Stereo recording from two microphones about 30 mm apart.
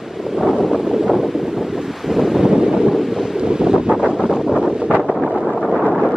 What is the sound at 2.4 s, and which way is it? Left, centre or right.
Wind noise, right.